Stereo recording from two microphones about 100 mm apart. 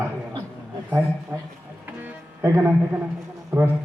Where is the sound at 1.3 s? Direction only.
30° right (ahead or behind).